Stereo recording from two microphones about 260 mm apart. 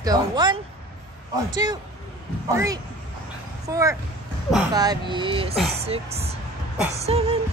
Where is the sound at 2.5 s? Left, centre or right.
Centre.